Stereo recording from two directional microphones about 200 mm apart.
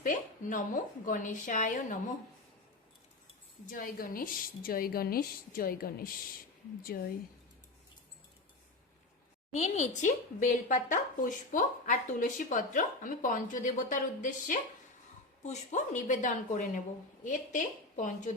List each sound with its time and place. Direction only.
0.0 s speech: 40° left (ahead or behind)
3.7 s a woman's voice: 45° left (ahead or behind)
9.5 s speech: 35° left (ahead or behind)